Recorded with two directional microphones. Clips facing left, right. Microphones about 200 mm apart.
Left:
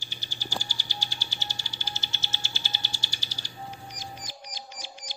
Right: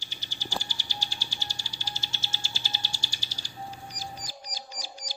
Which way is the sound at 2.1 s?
30° right (ahead or behind).